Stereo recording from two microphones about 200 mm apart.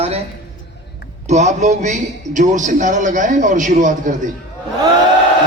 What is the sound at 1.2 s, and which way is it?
A man's voice, 35° right (ahead or behind).